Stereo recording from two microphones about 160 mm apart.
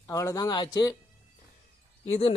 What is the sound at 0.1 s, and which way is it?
Speech, 20° left (ahead or behind).